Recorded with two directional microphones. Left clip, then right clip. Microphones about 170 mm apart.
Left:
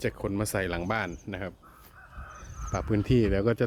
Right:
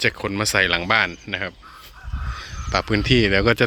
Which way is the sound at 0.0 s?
Centre (ahead or behind).